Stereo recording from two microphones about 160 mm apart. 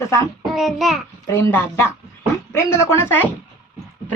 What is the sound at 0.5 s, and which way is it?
Speech, centre (ahead or behind).